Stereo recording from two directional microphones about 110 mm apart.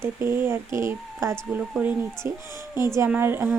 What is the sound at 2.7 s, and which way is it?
Speech, 25° right (ahead or behind).